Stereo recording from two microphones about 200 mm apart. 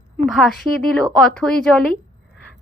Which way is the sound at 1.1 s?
Centre (ahead or behind).